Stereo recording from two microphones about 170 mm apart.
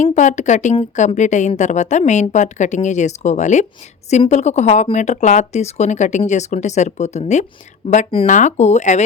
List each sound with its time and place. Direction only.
0.0 s speech: 45° left (ahead or behind)